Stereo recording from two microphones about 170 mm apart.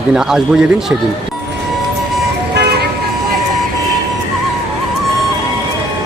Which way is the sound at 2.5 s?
70° right (ahead or behind).